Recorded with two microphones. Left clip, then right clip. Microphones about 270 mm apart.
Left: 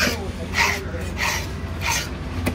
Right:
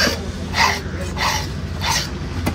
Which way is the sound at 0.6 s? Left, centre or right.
Right.